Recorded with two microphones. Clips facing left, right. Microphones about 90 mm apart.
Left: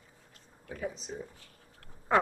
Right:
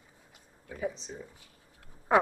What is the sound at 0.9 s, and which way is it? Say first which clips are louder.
Speech: left 3 dB; 15° left (ahead or behind).